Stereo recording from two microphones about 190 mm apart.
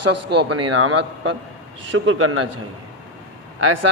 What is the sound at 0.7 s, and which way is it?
A man's voice, 90° right.